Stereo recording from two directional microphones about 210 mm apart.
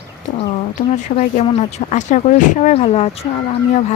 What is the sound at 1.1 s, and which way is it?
Speech, 30° left (ahead or behind).